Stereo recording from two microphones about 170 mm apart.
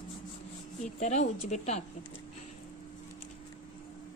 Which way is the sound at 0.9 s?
45° left (ahead or behind).